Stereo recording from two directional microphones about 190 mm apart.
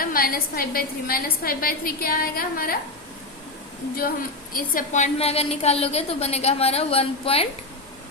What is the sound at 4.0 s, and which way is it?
A woman's voice, 50° left (ahead or behind).